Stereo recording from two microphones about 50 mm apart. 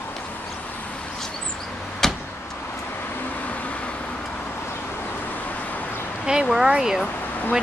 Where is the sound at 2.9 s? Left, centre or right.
Left.